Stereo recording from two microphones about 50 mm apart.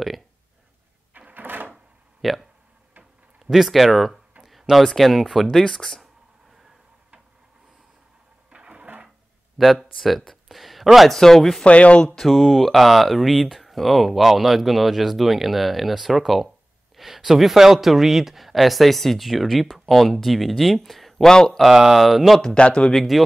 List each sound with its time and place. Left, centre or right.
1.1 s a sound: right
2.2 s speech: centre
3.0 s drawer open or close: centre
4.5 s speech: centre
8.5 s a sound: centre
9.6 s speech: centre
11.6 s speech: left
12.3 s speech: centre
21.3 s speech: centre
21.5 s speech: centre
22.4 s speech: centre
22.9 s speech: centre